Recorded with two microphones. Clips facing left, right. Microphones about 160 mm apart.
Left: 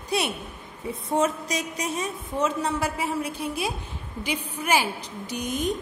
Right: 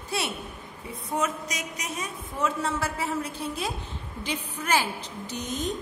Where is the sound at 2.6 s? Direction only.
15° left (ahead or behind).